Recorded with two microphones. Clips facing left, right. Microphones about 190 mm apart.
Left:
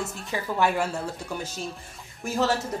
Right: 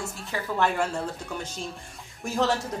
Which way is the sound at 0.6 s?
5° left (ahead or behind).